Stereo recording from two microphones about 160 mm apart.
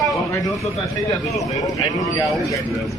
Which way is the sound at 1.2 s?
Centre (ahead or behind).